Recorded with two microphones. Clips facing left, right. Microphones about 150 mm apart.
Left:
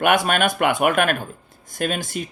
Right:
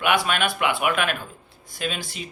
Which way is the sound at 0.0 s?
50° left (ahead or behind).